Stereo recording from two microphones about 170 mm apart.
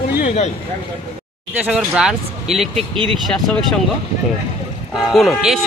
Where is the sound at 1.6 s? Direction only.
5° right (ahead or behind).